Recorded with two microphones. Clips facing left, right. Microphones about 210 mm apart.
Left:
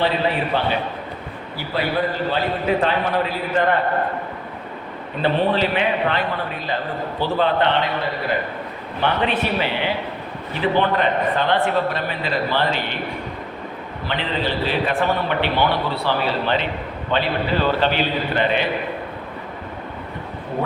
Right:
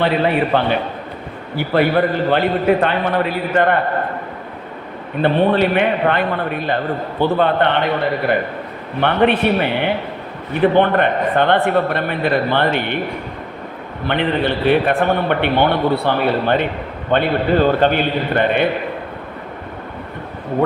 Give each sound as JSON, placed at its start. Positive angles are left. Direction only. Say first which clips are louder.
{"t": 0.5, "sound": "a man's voice", "louder": "right 4 dB", "side_deg": -60}
{"t": 5.2, "sound": "a man's voice", "louder": "right 5 dB", "side_deg": -55}
{"t": 9.0, "sound": "a man's voice", "louder": "right 6 dB", "side_deg": -60}
{"t": 14.1, "sound": "a man's voice", "louder": "right 6 dB", "side_deg": -60}